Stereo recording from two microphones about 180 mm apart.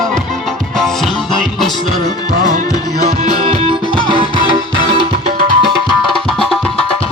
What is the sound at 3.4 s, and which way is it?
Music, 35° right (ahead or behind).